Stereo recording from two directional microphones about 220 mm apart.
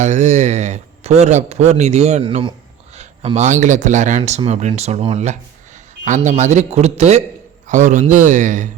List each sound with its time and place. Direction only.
0.0 s speech: 30° right (ahead or behind)